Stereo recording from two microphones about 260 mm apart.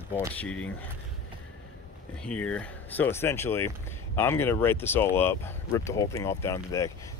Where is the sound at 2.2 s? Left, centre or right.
Centre.